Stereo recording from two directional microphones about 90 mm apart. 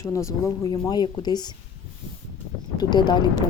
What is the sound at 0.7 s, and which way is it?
Speech, 50° left (ahead or behind).